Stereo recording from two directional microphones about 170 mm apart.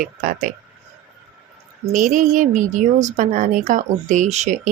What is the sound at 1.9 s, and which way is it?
Speech, 50° right (ahead or behind).